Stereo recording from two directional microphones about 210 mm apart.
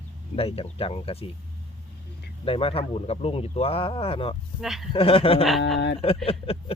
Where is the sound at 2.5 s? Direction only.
25° left (ahead or behind).